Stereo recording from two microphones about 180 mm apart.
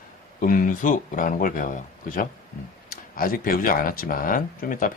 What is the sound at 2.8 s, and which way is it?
Speech, 55° left (ahead or behind).